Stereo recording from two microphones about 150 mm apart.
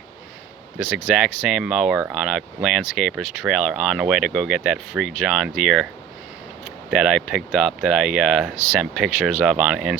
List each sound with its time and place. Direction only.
1.1 s speech: centre (ahead or behind)
6.9 s speech: centre (ahead or behind)